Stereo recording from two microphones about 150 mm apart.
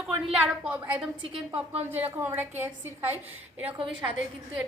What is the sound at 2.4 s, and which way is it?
Speech, 15° right (ahead or behind).